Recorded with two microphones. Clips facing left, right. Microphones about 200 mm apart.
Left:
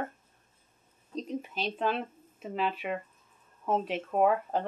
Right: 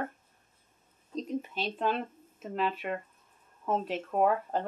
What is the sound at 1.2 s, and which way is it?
Speech, centre (ahead or behind).